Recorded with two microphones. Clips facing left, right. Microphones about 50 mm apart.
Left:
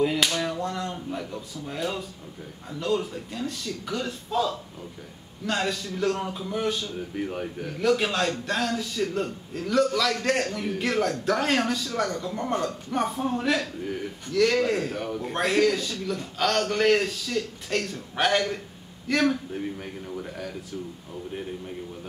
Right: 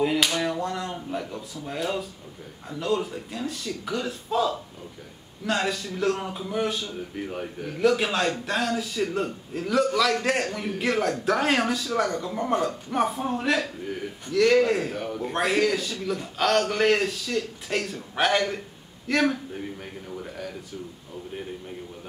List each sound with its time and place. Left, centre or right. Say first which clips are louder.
0.0 s a man's voice: right 1 dB; centre